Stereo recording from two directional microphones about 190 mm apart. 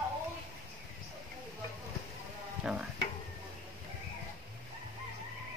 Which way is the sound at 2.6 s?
5° right (ahead or behind).